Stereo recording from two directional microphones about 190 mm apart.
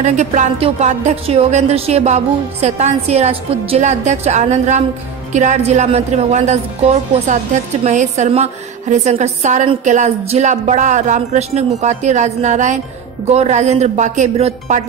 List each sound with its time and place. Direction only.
0.0 s speech: 40° right (ahead or behind)